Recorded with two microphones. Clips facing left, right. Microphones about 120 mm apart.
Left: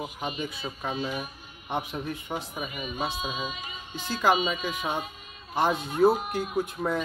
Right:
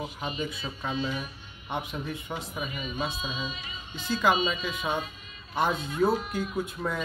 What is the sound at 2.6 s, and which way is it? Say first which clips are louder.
Speech: left 1 dB; 50° left (ahead or behind).